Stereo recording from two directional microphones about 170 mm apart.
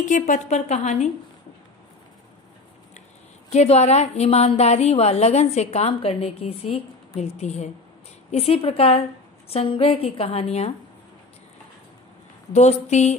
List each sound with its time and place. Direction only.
0.0 s a woman's voice: 45° left (ahead or behind)
3.4 s a woman's voice: 40° left (ahead or behind)
12.5 s a woman's voice: 40° left (ahead or behind)